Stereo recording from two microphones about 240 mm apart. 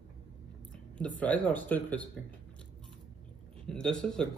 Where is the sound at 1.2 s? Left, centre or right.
Centre.